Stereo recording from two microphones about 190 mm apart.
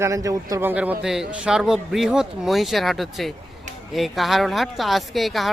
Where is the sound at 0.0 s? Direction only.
15° right (ahead or behind).